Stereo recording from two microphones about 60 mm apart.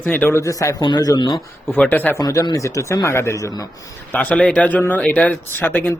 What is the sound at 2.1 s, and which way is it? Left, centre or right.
A man's voice, left.